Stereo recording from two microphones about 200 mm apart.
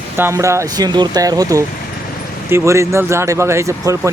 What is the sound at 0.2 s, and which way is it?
Speech, 15° right (ahead or behind).